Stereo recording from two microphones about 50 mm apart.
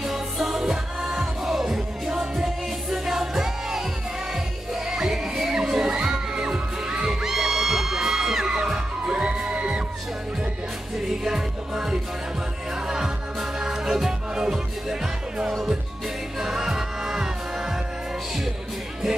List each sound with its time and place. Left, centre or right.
0.0 s music: centre; by 9.8 s right
11.2 s music: centre